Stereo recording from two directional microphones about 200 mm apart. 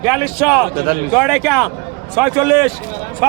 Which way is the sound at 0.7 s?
50° right (ahead or behind).